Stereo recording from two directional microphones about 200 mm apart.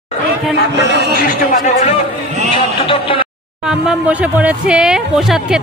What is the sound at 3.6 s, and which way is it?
Speech, 5° right (ahead or behind).